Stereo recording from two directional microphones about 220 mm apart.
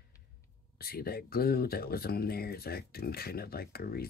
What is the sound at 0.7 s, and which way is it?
Speech, 45° left (ahead or behind).